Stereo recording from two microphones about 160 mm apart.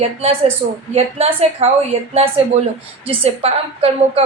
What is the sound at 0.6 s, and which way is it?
A woman's voice, 45° right (ahead or behind).